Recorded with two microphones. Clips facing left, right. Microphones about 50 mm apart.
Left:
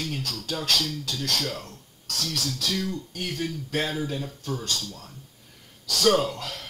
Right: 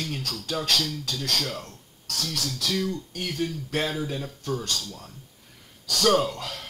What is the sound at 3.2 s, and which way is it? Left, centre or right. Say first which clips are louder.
Speech: right 1 dB; centre.